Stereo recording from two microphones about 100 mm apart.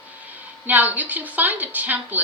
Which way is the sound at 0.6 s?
15° right (ahead or behind).